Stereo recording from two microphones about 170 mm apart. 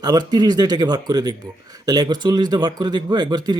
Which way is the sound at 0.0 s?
25° right (ahead or behind).